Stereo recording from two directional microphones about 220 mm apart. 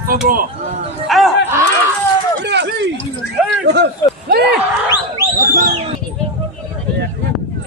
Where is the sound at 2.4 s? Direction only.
50° right (ahead or behind).